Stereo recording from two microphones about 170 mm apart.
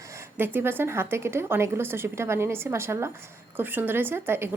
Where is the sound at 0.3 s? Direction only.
10° right (ahead or behind).